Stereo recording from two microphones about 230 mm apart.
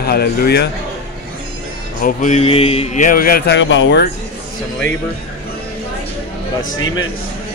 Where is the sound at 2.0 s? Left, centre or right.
Left.